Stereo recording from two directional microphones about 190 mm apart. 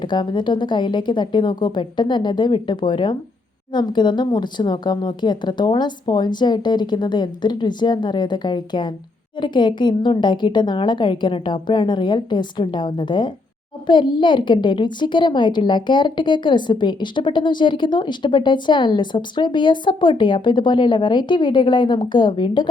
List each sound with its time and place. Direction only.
0.0 s a woman's voice: 25° left (ahead or behind)